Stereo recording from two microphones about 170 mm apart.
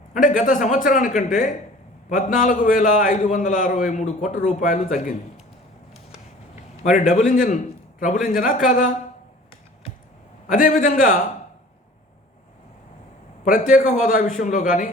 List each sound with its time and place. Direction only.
0.1 s a man's voice: 50° left (ahead or behind)
6.7 s a man's voice: 45° left (ahead or behind)
10.5 s a man's voice: 50° left (ahead or behind)
13.4 s a man's voice: 50° left (ahead or behind)